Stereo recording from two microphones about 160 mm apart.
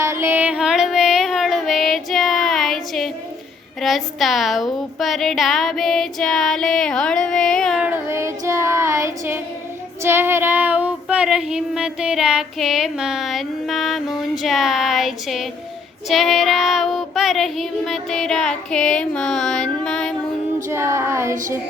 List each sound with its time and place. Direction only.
0.0 s music: 15° right (ahead or behind); by 3.1 s centre (ahead or behind)
3.8 s female singing: centre (ahead or behind)
7.9 s female singing: 15° right (ahead or behind); by 20.1 s 5° left (ahead or behind)
20.7 s female singing: 15° right (ahead or behind)